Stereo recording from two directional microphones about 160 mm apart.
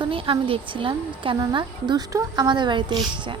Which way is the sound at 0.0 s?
35° right (ahead or behind).